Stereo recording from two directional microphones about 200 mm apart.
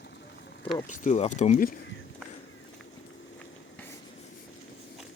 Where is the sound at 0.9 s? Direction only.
35° left (ahead or behind).